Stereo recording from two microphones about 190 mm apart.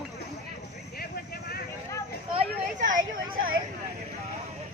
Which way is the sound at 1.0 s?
55° left (ahead or behind).